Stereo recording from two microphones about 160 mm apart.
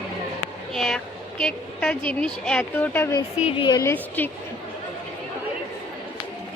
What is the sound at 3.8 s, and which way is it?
Speech, 15° left (ahead or behind).